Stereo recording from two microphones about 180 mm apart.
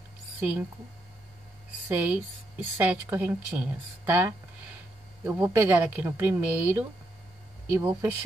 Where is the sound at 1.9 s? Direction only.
10° right (ahead or behind).